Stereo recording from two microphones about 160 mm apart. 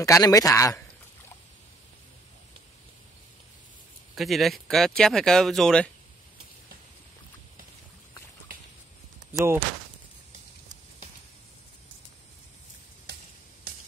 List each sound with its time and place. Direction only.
0.0 s a man's voice: 20° left (ahead or behind)
4.1 s speech: centre (ahead or behind)
9.3 s speech: 20° right (ahead or behind)